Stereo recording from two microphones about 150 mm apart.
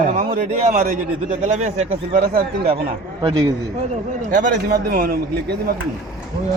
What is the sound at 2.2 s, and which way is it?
Speech, 70° right (ahead or behind).